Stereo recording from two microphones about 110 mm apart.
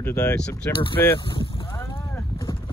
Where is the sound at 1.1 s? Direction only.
45° left (ahead or behind).